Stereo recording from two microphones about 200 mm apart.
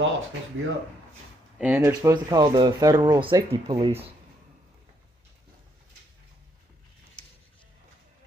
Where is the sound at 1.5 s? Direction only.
10° right (ahead or behind); by 4.0 s 25° right (ahead or behind).